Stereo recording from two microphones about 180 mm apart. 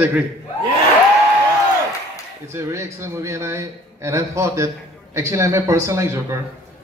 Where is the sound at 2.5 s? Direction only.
15° right (ahead or behind).